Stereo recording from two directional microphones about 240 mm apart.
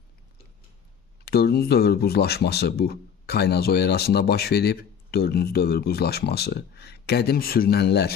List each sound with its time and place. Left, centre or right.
1.2 s speech: left